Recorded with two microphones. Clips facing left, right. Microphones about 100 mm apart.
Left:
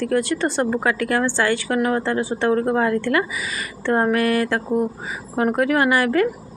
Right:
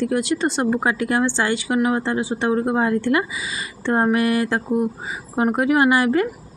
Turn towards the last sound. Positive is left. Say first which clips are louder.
# right 1 dB
turn(degrees=-25)  # may be behind; listen again after turning